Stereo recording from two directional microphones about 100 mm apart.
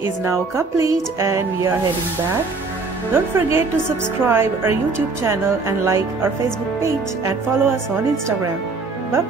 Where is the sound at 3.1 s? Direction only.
25° right (ahead or behind).